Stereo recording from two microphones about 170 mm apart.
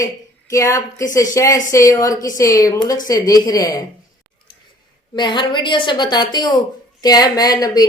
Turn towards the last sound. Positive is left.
turn(degrees=20)  # may be behind; listen again after turning